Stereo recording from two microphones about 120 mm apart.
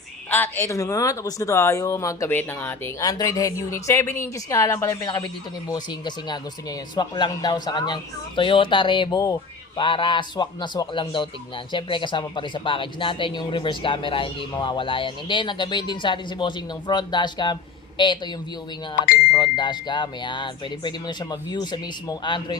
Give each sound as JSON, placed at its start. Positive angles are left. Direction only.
{"t": 0.3, "sound": "speech", "side_deg": 15}
{"t": 2.3, "sound": "speech", "side_deg": 15}
{"t": 3.0, "sound": "speech", "side_deg": 30}
{"t": 4.9, "sound": "a man's voice", "side_deg": 35}
{"t": 9.7, "sound": "a man's voice", "side_deg": 45}